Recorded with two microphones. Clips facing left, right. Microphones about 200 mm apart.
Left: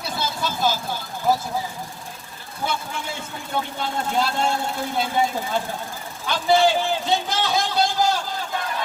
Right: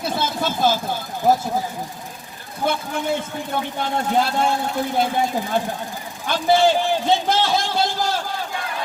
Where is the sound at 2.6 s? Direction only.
55° right (ahead or behind).